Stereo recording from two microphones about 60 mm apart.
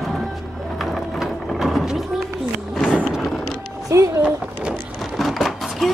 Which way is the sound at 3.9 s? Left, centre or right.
Right.